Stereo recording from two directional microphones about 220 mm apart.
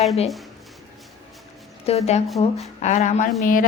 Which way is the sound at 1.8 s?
30° left (ahead or behind).